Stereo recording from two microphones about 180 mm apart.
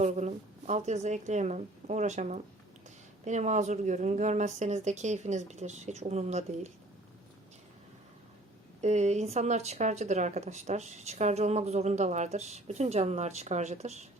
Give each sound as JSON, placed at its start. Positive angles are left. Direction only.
{"t": 0.0, "sound": "speech", "side_deg": -40}
{"t": 8.8, "sound": "speech", "side_deg": -40}